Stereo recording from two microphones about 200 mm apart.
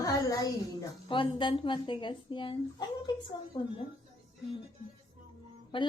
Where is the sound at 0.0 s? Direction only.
20° left (ahead or behind).